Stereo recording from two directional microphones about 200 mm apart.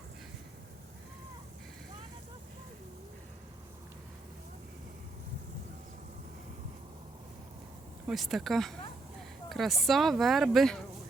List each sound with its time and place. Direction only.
8.0 s speech: centre (ahead or behind)